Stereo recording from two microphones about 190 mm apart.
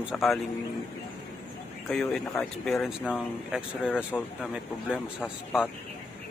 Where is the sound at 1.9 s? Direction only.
5° left (ahead or behind).